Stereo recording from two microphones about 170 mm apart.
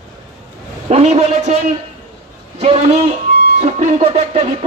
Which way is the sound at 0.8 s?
40° right (ahead or behind).